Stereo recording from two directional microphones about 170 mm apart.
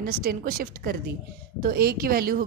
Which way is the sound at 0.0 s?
60° right (ahead or behind).